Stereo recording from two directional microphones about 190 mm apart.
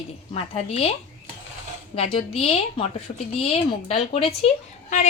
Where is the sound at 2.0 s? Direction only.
30° left (ahead or behind).